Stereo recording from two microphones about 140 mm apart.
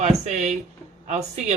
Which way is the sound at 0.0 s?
50° right (ahead or behind).